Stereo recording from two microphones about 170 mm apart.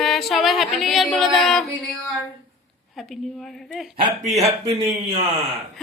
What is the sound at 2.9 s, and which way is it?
Speech, centre (ahead or behind).